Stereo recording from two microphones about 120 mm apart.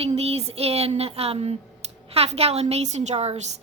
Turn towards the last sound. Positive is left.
turn(degrees=-65)  # may be behind; listen again after turning